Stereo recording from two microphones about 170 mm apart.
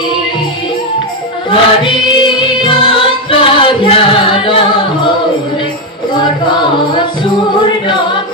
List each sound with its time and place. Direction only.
1.5 s music: 30° left (ahead or behind)
6.1 s music: 30° left (ahead or behind)